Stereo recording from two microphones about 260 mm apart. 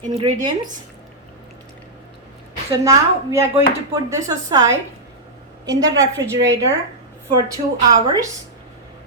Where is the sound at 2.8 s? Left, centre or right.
Centre.